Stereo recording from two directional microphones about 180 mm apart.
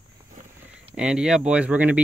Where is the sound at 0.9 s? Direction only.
5° right (ahead or behind).